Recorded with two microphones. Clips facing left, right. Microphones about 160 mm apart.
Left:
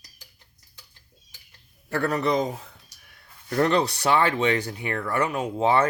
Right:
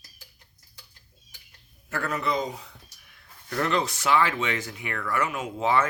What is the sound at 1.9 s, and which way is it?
Speech, 35° left (ahead or behind).